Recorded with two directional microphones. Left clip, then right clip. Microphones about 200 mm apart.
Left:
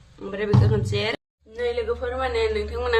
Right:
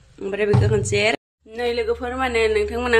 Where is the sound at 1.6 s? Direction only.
50° right (ahead or behind).